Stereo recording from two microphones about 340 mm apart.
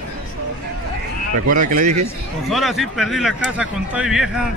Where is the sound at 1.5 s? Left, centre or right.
Right.